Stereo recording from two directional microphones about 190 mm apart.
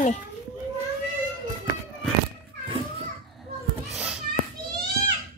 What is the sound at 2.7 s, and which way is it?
Children playing, 25° right (ahead or behind).